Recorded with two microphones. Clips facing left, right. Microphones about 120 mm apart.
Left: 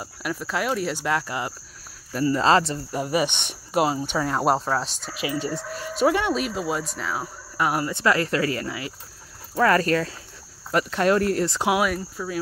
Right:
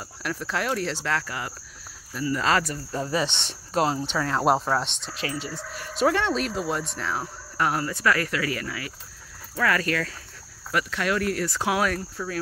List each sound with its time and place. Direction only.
0.2 s speech: 5° left (ahead or behind); by 2.8 s 30° left (ahead or behind)
2.9 s speech: 15° left (ahead or behind)
4.5 s speech: centre (ahead or behind)
7.9 s speech: 25° left (ahead or behind)
8.6 s speech: 20° left (ahead or behind)
9.6 s speech: 35° left (ahead or behind)
11.5 s speech: 15° left (ahead or behind)